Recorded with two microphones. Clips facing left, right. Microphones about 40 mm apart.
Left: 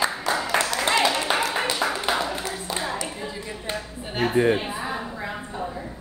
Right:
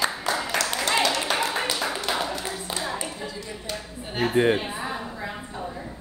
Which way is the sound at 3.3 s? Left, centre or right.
Left.